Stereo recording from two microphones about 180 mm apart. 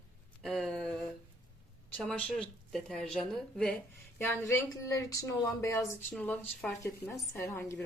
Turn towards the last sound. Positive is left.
turn(degrees=15)  # may be behind; listen again after turning